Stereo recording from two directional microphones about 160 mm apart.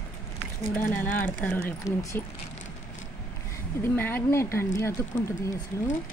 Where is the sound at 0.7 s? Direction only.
10° left (ahead or behind).